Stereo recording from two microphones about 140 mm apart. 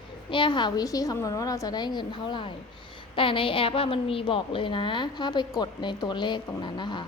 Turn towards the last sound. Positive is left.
turn(degrees=35)  # may be behind; listen again after turning